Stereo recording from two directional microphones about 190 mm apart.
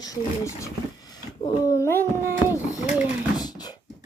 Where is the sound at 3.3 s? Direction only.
20° left (ahead or behind).